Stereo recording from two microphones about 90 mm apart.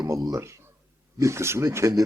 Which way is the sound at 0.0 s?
40° right (ahead or behind).